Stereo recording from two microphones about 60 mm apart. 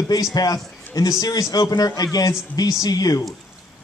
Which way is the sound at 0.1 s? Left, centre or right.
Left.